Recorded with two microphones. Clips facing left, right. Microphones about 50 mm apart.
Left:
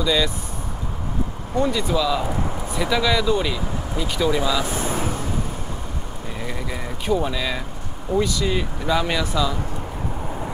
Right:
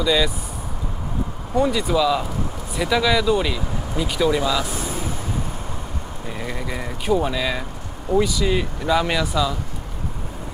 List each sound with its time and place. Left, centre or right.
0.0 s speech: centre
1.6 s speech: centre
4.7 s vehicle: left
6.4 s speech: centre